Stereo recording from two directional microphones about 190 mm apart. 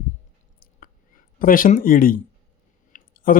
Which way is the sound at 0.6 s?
45° left (ahead or behind).